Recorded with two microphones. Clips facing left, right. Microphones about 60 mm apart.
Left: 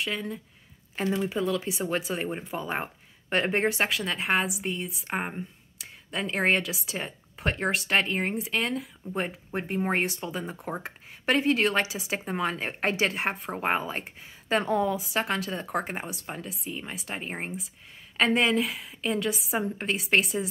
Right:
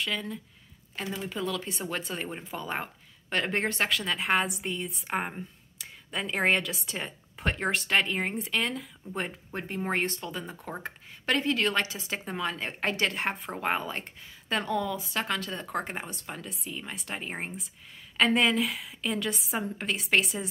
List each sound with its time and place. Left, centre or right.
0.0 s speech: centre
1.0 s a woman's voice: centre
2.8 s a sound: centre
3.5 s a woman's voice: centre
9.5 s speech: centre
10.7 s a woman's voice: left; by 20.4 s centre